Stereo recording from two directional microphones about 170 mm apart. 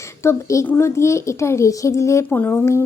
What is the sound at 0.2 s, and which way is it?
A woman's voice, 15° left (ahead or behind).